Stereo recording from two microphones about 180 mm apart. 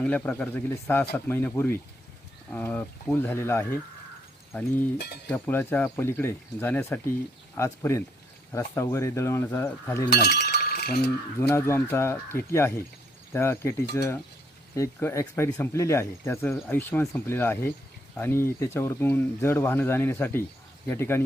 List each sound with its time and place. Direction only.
0.0 s speech: 10° left (ahead or behind)
5.3 s speech: 10° left (ahead or behind)
10.1 s chink: 65° left (ahead or behind)
11.3 s speech: 15° left (ahead or behind)